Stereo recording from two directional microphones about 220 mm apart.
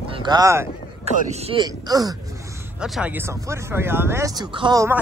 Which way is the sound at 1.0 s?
30° right (ahead or behind).